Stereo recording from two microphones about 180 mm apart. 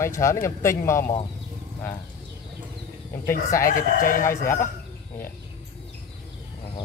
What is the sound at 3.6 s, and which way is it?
Speech, 50° left (ahead or behind).